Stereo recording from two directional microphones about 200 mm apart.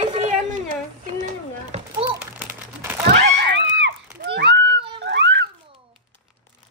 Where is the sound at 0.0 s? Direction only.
30° right (ahead or behind).